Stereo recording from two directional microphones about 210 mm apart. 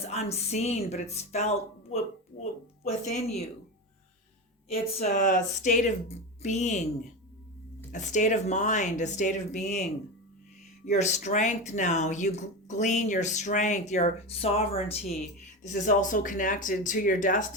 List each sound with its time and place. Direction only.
0.0 s speech: 30° left (ahead or behind)
4.7 s speech: 30° left (ahead or behind)
7.9 s speech: 35° left (ahead or behind)